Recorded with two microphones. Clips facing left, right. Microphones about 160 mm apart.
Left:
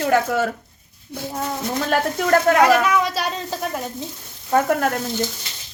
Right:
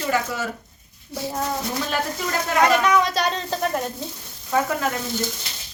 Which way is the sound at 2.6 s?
5° left (ahead or behind).